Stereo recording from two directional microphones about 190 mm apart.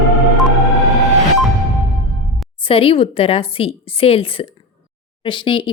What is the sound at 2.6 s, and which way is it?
Speech, 30° left (ahead or behind).